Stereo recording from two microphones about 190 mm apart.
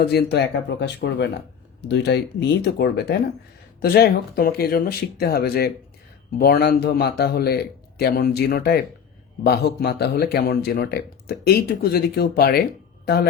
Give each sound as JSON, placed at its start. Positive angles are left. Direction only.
{"t": 0.0, "sound": "a man's voice", "side_deg": 55}